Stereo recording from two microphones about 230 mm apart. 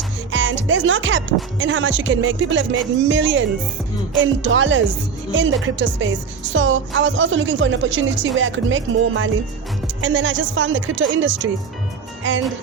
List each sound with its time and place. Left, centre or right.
0.3 s speech: right